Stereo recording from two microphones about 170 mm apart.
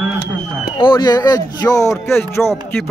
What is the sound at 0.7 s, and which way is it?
Speech, 30° left (ahead or behind).